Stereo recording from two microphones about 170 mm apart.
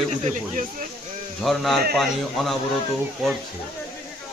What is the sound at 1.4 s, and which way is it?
A man's voice, centre (ahead or behind).